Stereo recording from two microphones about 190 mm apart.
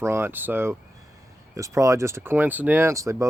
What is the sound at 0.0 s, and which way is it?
Speech, 15° right (ahead or behind).